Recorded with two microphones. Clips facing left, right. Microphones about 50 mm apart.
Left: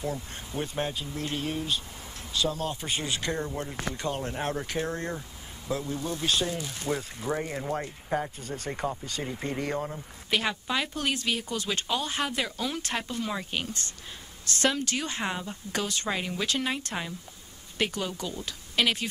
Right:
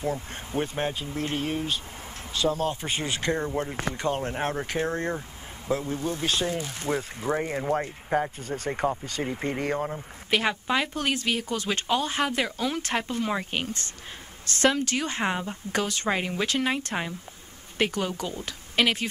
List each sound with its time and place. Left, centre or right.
0.0 s speech: right
16.1 s a woman's voice: right
17.7 s speech: right